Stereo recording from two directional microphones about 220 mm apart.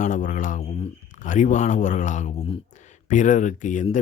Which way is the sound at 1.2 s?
35° left (ahead or behind).